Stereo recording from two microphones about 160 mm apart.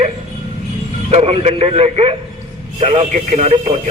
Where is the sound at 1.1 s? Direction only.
40° right (ahead or behind).